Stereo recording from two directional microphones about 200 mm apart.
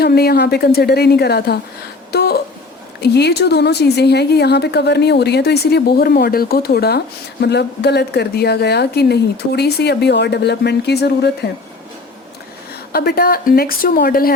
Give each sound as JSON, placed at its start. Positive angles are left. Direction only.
{"t": 0.0, "sound": "a woman's voice", "side_deg": 50}
{"t": 12.9, "sound": "a woman's voice", "side_deg": 50}